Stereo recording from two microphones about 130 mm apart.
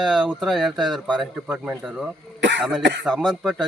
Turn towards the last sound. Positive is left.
turn(degrees=-5)  # may be behind; listen again after turning